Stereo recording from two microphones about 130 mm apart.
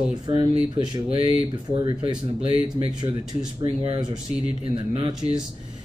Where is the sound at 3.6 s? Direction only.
40° right (ahead or behind).